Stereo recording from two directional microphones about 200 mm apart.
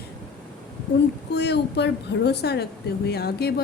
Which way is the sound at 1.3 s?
55° left (ahead or behind).